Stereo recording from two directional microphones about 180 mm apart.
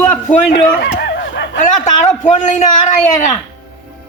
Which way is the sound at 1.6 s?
45° left (ahead or behind).